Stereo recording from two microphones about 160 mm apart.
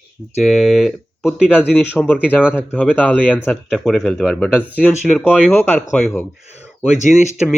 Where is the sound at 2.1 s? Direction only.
10° left (ahead or behind); by 5.4 s 5° right (ahead or behind).